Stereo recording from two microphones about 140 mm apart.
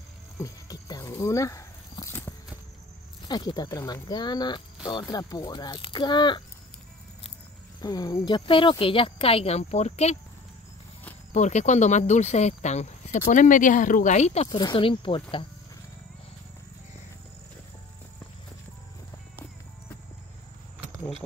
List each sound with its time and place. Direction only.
0.4 s a sound: 25° left (ahead or behind)
3.3 s speech: 30° left (ahead or behind)
7.8 s speech: 25° left (ahead or behind)
8.4 s speech: 40° left (ahead or behind)
11.3 s speech: 60° left (ahead or behind)
13.3 s speech: 65° left (ahead or behind)
14.5 s speech: 35° left (ahead or behind)